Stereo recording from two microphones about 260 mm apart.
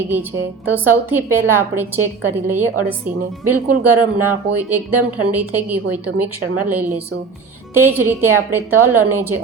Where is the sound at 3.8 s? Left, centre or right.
Centre.